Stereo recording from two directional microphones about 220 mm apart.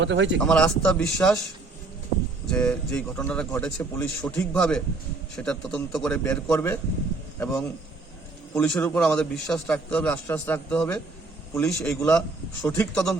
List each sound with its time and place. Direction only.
0.0 s speech: 55° right (ahead or behind)
0.4 s a man's voice: 5° left (ahead or behind)
2.5 s a man's voice: 5° left (ahead or behind)